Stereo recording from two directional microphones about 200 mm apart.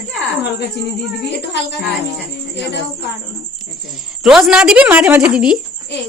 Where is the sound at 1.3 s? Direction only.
60° left (ahead or behind).